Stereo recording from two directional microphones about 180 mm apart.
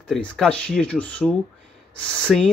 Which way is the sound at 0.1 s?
5° left (ahead or behind).